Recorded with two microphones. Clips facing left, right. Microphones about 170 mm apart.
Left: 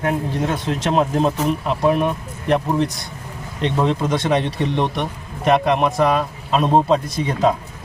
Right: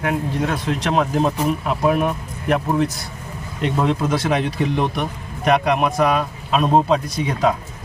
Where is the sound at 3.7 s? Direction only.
Centre (ahead or behind).